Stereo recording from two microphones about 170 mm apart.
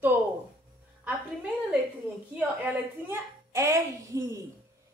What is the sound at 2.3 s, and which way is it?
A child's voice, 10° right (ahead or behind).